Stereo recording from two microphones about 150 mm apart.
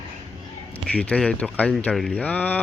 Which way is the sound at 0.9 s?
10° left (ahead or behind).